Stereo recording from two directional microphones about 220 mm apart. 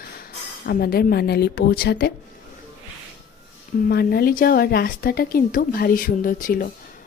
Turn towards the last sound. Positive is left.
turn(degrees=40)  # may be behind; listen again after turning